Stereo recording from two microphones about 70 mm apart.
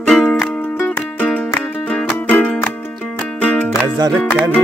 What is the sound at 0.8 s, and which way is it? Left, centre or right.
Music, left.